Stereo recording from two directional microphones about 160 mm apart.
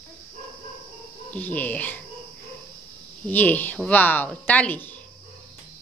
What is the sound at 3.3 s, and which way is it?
Speech, 10° left (ahead or behind).